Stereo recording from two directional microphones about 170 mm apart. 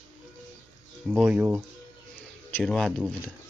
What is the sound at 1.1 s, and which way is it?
Speech, 10° right (ahead or behind).